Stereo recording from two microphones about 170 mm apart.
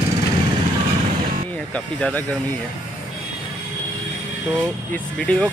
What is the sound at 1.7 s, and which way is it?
Speech, 5° left (ahead or behind).